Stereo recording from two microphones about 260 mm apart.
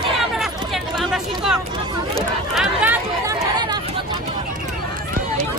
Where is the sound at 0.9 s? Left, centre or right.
Centre.